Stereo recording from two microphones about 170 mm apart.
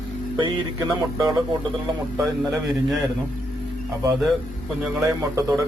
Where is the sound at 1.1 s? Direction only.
20° right (ahead or behind).